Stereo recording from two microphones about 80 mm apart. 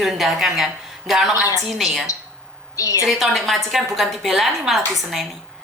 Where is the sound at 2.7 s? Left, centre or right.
Left.